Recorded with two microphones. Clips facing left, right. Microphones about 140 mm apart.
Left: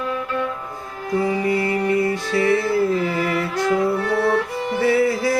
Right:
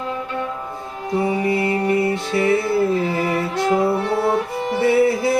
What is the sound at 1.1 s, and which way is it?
Music, 25° right (ahead or behind).